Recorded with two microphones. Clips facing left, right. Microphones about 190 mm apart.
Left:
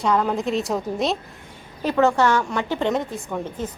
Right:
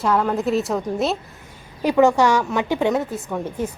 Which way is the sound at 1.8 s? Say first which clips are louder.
Right 3 dB; 15° right (ahead or behind).